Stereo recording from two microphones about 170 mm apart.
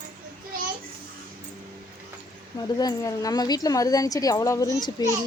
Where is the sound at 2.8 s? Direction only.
20° left (ahead or behind).